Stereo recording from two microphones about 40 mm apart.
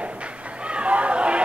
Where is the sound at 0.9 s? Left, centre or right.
Right.